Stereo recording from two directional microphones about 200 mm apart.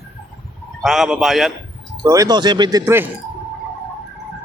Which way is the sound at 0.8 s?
Centre (ahead or behind).